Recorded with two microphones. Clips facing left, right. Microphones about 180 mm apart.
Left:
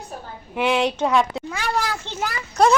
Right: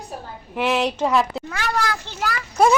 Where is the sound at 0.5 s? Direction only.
Centre (ahead or behind).